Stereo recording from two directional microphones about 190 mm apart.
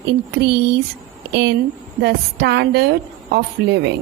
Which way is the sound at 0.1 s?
60° right (ahead or behind).